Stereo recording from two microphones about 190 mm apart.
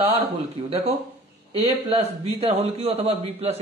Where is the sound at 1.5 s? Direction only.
30° right (ahead or behind).